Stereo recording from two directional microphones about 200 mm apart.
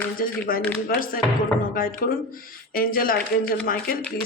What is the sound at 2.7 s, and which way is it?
Speech, 45° left (ahead or behind).